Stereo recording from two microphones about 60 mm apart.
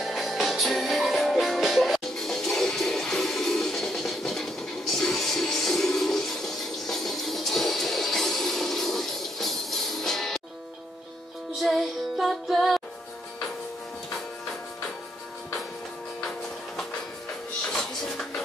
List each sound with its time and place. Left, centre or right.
0.0 s music: centre
11.6 s music: centre
17.7 s music: centre